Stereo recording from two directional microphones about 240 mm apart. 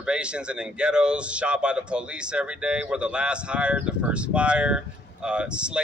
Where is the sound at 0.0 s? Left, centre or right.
Centre.